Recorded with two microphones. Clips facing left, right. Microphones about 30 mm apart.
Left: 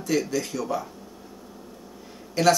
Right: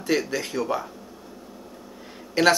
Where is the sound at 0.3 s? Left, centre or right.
Right.